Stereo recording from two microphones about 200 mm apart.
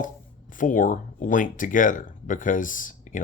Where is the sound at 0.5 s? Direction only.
40° left (ahead or behind).